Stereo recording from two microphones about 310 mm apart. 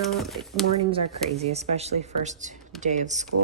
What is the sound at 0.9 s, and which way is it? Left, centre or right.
Speech, centre.